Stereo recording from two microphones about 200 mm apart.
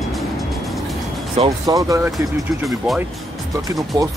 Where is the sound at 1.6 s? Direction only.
15° right (ahead or behind).